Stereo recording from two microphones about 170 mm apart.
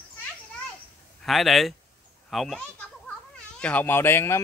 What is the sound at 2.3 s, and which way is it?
Children playing, centre (ahead or behind).